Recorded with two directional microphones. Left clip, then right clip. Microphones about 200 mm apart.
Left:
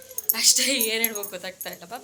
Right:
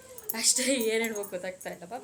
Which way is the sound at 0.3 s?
10° right (ahead or behind).